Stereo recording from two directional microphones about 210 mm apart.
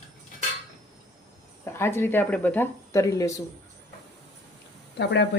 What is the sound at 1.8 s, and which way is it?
Speech, 10° left (ahead or behind).